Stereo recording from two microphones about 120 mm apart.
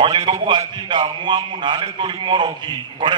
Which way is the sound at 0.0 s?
45° right (ahead or behind).